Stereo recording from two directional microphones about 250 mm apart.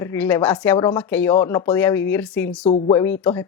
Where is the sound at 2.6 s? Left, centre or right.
Left.